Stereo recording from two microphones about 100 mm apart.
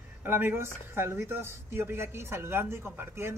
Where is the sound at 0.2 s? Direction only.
20° right (ahead or behind).